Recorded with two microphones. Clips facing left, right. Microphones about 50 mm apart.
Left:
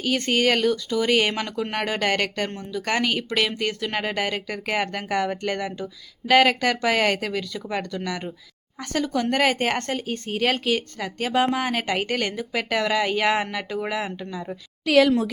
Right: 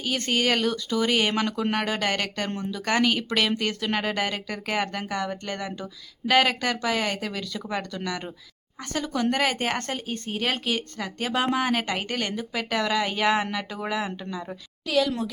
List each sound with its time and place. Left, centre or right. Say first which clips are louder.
0.0 s speech: left 4 dB; left
0.7 s speech: left 3 dB; right
1.0 s a woman's voice: left 2 dB; left
3.0 s speech: right 1 dB; left
5.0 s a woman's voice: left 5 dB; left
6.2 s a woman's voice: left 4 dB; left
7.5 s speech: left 2 dB; centre
8.9 s a woman's voice: left 2 dB; left
11.3 s speech: left 2 dB; left
11.9 s a woman's voice: left 4 dB; left
14.8 s a woman's voice: left 7 dB; left